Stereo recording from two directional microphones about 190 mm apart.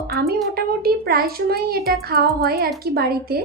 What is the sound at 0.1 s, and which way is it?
A woman's voice, 55° right (ahead or behind).